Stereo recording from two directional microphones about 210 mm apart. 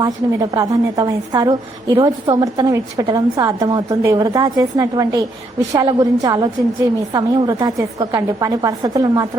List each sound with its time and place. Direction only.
0.0 s a woman's voice: 20° right (ahead or behind)